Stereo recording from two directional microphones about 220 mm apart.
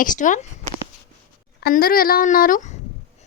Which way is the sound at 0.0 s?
35° left (ahead or behind).